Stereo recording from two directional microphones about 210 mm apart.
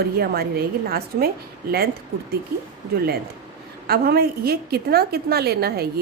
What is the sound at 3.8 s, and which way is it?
A woman's voice, 45° right (ahead or behind).